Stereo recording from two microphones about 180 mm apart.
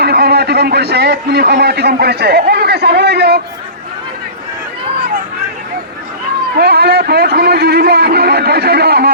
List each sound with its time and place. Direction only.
0.0 s a man's voice: 65° right (ahead or behind)
6.6 s a man's voice: 65° right (ahead or behind)